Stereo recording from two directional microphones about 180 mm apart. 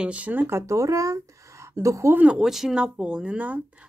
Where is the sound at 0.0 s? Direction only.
5° right (ahead or behind).